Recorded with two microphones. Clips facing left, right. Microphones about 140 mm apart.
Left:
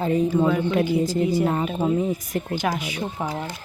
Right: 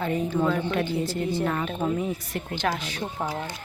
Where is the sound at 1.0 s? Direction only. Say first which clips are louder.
Left 6 dB; 40° left (ahead or behind).